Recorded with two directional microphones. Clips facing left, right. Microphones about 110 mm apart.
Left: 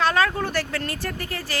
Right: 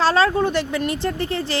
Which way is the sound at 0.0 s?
30° right (ahead or behind).